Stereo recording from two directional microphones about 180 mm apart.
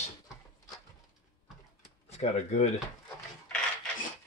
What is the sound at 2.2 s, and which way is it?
Speech, 40° left (ahead or behind).